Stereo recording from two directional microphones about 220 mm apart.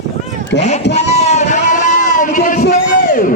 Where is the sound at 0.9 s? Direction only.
30° left (ahead or behind).